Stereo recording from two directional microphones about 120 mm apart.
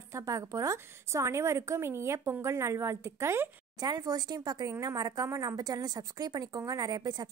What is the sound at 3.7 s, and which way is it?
Speech, 30° right (ahead or behind).